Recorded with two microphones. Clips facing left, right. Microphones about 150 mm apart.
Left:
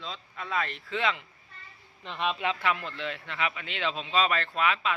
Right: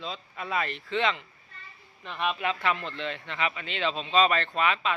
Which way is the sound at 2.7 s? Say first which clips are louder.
Right 1 dB; 5° left (ahead or behind).